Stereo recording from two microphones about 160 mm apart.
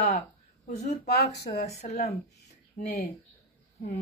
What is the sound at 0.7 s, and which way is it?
Speech, 45° left (ahead or behind).